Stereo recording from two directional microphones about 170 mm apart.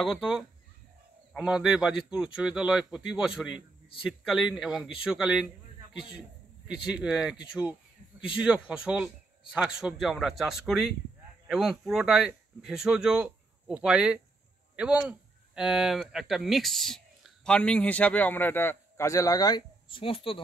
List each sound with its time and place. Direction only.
0.0 s a man's voice: centre (ahead or behind)
8.4 s a man's voice: 5° right (ahead or behind); by 20.3 s 30° left (ahead or behind)